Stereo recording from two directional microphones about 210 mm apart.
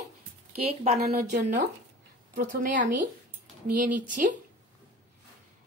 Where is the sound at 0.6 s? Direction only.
30° right (ahead or behind).